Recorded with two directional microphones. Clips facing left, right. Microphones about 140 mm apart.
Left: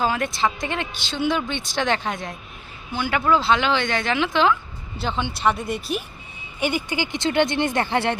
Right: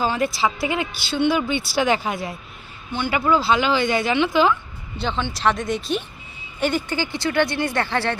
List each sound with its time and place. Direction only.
0.0 s speech: 5° right (ahead or behind); by 8.2 s 20° left (ahead or behind)